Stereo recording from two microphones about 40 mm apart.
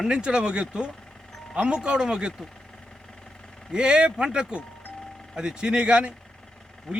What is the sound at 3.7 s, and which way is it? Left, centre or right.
Speech, right.